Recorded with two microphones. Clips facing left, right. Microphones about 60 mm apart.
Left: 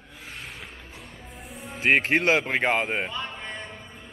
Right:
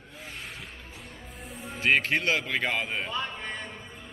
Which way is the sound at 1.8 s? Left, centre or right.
Left.